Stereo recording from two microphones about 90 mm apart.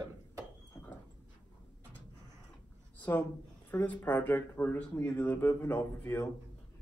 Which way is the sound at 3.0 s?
20° left (ahead or behind).